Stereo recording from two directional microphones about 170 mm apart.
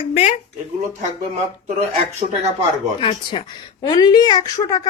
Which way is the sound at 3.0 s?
30° left (ahead or behind).